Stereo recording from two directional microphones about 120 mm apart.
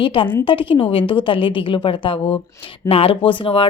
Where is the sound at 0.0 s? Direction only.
45° left (ahead or behind).